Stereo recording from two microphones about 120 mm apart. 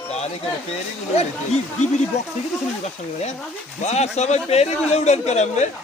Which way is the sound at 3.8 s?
70° left (ahead or behind).